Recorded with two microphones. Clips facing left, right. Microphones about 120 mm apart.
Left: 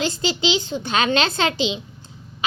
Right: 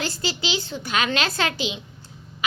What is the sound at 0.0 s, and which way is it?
A child's voice, 20° left (ahead or behind).